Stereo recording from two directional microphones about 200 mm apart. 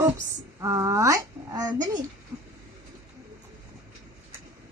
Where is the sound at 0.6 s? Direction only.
15° right (ahead or behind).